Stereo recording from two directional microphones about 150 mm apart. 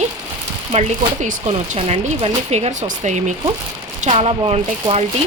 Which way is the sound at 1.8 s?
45° right (ahead or behind).